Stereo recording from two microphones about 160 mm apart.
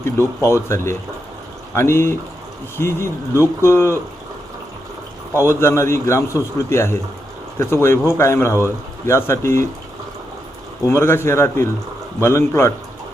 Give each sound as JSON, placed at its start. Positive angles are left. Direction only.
{"t": 0.0, "sound": "a man's voice", "side_deg": 15}
{"t": 5.4, "sound": "a man's voice", "side_deg": 15}
{"t": 10.8, "sound": "a man's voice", "side_deg": 15}